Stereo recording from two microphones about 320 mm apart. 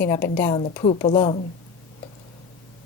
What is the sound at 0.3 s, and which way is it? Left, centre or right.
Speech, centre.